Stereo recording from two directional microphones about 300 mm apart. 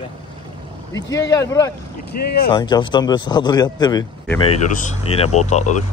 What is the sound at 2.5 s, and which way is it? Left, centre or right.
Speech, centre.